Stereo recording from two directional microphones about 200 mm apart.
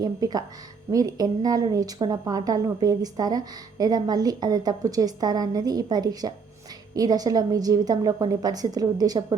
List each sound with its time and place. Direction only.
0.0 s a woman's voice: 20° right (ahead or behind)